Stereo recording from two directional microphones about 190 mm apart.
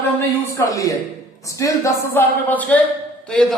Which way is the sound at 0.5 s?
15° left (ahead or behind).